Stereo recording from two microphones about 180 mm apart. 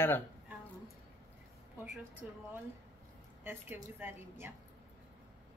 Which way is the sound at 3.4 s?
10° right (ahead or behind).